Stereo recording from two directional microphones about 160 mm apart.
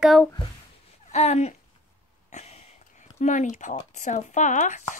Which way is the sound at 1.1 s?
45° left (ahead or behind).